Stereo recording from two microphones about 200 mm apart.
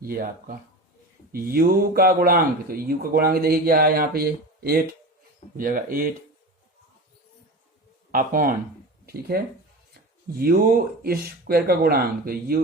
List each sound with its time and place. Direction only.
0.0 s speech: 45° right (ahead or behind)
8.1 s speech: 45° right (ahead or behind)